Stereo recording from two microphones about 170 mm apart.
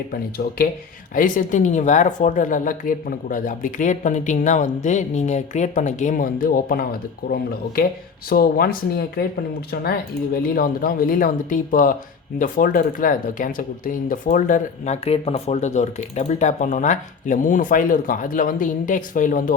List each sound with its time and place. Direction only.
0.1 s speech: 60° left (ahead or behind)
10.4 s speech: 55° left (ahead or behind)